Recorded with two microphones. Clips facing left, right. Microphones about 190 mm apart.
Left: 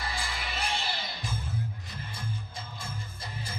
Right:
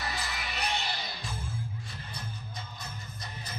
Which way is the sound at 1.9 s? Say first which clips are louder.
Left 3 dB; 25° left (ahead or behind).